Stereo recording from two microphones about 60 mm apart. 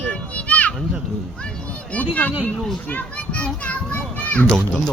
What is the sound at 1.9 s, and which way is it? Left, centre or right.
A child's voice, left.